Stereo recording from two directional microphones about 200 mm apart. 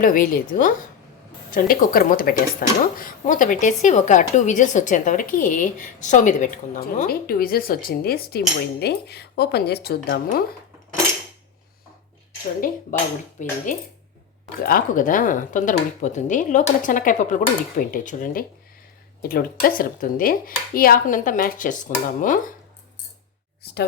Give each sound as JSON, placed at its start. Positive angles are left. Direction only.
{"t": 0.0, "sound": "speech", "side_deg": 45}
{"t": 12.5, "sound": "speech", "side_deg": 45}
{"t": 14.6, "sound": "speech", "side_deg": 45}